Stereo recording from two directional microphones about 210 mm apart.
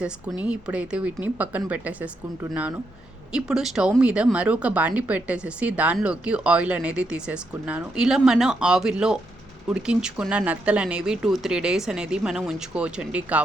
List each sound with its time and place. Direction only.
0.4 s speech: 5° right (ahead or behind)